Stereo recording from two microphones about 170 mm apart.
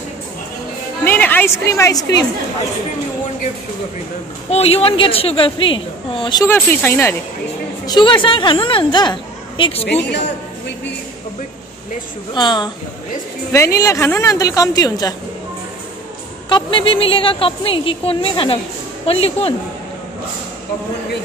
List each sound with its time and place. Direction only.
1.0 s a woman's voice: 10° left (ahead or behind)
4.5 s a woman's voice: 35° left (ahead or behind)
6.4 s speech: 15° left (ahead or behind)
7.8 s speech: 25° left (ahead or behind)
12.4 s speech: 25° left (ahead or behind)
16.4 s a woman's voice: 30° left (ahead or behind)